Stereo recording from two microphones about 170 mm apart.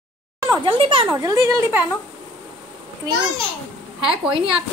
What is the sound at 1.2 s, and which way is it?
Speech, 20° right (ahead or behind).